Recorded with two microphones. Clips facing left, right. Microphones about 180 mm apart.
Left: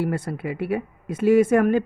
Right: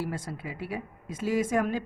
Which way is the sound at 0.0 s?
60° left (ahead or behind).